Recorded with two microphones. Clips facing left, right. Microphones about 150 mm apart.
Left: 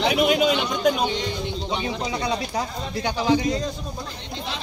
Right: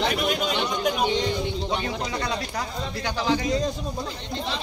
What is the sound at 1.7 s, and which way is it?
Speech, 15° left (ahead or behind).